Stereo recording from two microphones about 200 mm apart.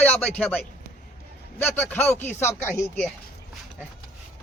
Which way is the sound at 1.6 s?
10° left (ahead or behind).